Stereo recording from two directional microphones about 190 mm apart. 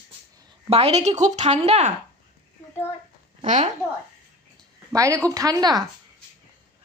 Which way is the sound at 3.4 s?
40° right (ahead or behind).